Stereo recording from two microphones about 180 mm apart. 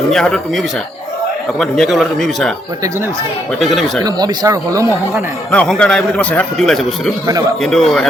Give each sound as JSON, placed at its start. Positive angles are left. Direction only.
{"t": 0.1, "sound": "a man's voice", "side_deg": 0}
{"t": 3.6, "sound": "a man's voice", "side_deg": 0}
{"t": 4.0, "sound": "speech", "side_deg": -20}
{"t": 5.5, "sound": "a man's voice", "side_deg": 5}